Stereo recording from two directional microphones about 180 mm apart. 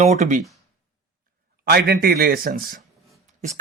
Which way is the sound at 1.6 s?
60° right (ahead or behind).